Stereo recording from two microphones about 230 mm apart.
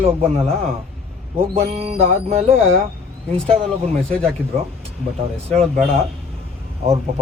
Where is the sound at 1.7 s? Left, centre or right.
Right.